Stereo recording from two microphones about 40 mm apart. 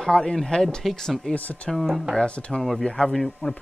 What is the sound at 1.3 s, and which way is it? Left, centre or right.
Speech, left.